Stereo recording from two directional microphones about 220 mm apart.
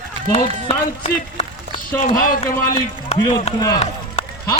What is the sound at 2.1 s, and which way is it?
Speech, 40° left (ahead or behind).